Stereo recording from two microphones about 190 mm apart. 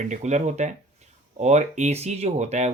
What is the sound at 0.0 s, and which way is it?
Speech, 40° right (ahead or behind).